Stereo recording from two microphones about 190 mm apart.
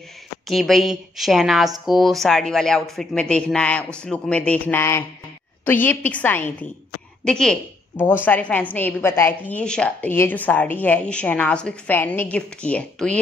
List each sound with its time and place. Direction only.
0.5 s a woman's voice: centre (ahead or behind)